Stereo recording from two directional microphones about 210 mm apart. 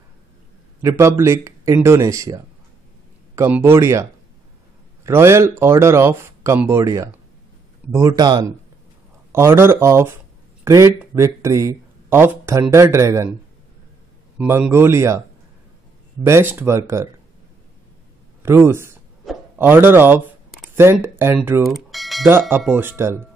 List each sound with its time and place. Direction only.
0.8 s speech: 15° right (ahead or behind)
14.4 s speech: 10° right (ahead or behind)
16.3 s speech: 10° right (ahead or behind)
18.4 s a man's voice: 10° right (ahead or behind)